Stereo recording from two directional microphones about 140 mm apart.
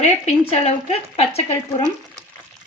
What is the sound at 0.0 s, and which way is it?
Speech, 50° left (ahead or behind).